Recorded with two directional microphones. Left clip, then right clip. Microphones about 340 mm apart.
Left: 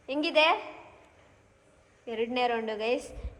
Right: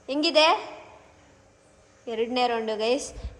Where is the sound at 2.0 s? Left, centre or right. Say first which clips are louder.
Right 4 dB; centre.